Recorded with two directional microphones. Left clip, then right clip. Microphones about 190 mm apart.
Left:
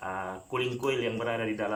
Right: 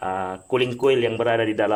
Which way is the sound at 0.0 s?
55° right (ahead or behind).